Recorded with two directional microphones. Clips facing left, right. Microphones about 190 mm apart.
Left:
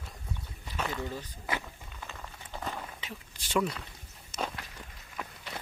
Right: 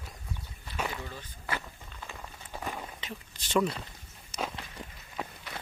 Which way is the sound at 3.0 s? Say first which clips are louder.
Right 2 dB; 5° left (ahead or behind).